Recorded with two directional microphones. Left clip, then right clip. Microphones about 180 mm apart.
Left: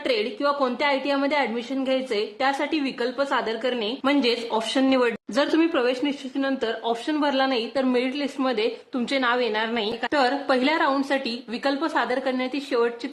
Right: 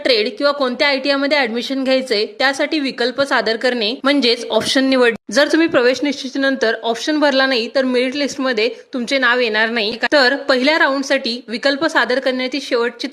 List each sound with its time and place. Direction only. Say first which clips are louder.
0.0 s a woman's voice: right 8 dB; 25° right (ahead or behind)